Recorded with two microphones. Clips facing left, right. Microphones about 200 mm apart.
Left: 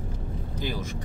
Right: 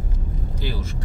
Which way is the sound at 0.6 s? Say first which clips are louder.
Even; 15° left (ahead or behind).